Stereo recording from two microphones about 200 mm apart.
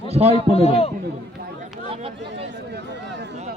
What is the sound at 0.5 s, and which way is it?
Speech, 30° left (ahead or behind).